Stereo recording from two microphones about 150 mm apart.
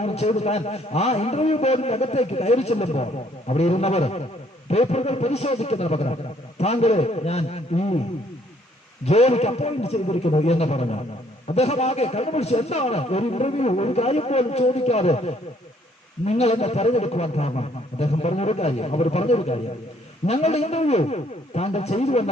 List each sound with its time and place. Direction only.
0.0 s a man's voice: 45° left (ahead or behind)
9.0 s a man's voice: 45° left (ahead or behind)